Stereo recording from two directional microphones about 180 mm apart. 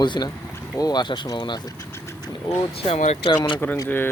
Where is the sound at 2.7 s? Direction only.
35° left (ahead or behind).